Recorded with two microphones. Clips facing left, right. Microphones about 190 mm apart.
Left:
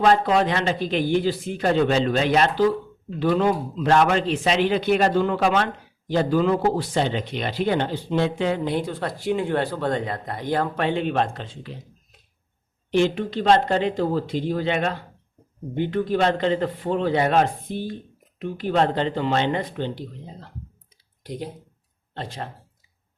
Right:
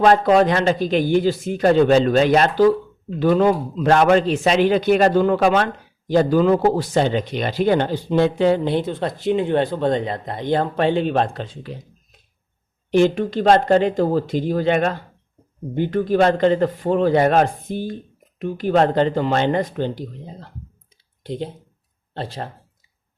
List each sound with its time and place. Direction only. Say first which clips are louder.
0.0 s a man's voice: right 5 dB; 45° right (ahead or behind)
12.9 s a man's voice: right 4 dB; 45° right (ahead or behind)
21.2 s speech: right 5 dB; 25° right (ahead or behind)